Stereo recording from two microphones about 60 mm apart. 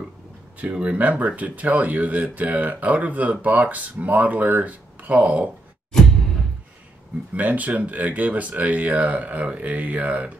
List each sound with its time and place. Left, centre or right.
0.6 s speech: right
5.9 s music: centre
7.3 s speech: right